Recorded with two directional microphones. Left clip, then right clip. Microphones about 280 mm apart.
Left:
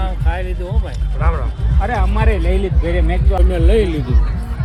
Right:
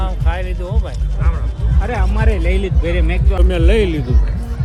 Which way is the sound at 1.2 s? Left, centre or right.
Centre.